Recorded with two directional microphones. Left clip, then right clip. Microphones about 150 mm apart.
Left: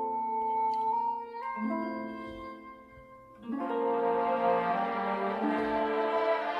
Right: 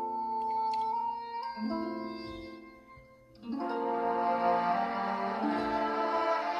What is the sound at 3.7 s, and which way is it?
Music, 45° left (ahead or behind).